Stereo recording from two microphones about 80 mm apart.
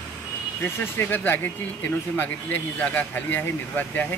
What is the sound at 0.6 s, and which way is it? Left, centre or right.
Speech, left.